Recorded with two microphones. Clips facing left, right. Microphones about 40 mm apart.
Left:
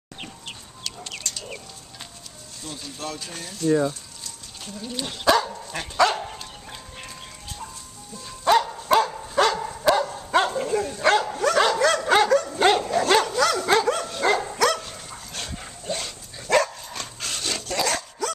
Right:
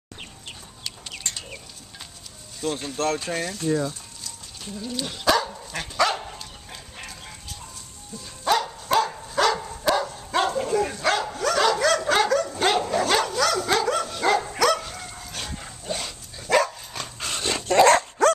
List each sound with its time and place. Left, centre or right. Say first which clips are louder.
1.2 s a sound: right 3 dB; right
2.6 s speech: right 9 dB; right
4.7 s speech: right 1 dB; centre
6.3 s dog: left 2 dB; centre
8.3 s dog: left 4 dB; centre
11.0 s bow-wow: left 4 dB; centre
11.7 s dog: left 2 dB; centre
12.8 s bow-wow: left 2 dB; centre
14.6 s dog: right 1 dB; centre
17.4 s dog: right 6 dB; right
17.7 s dog: right 11 dB; right